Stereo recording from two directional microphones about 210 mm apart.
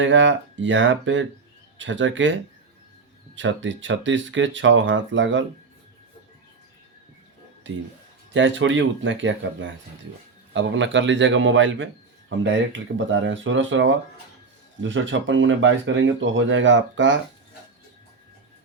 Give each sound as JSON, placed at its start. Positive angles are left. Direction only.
{"t": 0.0, "sound": "speech", "side_deg": -60}
{"t": 3.3, "sound": "speech", "side_deg": -60}
{"t": 7.6, "sound": "speech", "side_deg": -60}